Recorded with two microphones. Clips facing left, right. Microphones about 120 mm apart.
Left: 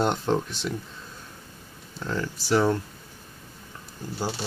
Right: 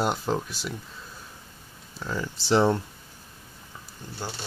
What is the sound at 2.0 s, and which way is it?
Speech, 5° right (ahead or behind).